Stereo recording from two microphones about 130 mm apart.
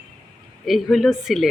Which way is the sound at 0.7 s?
Centre (ahead or behind).